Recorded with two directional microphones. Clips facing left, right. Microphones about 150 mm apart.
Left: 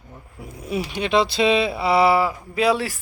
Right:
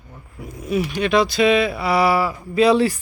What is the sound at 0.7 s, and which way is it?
Speech, 25° left (ahead or behind).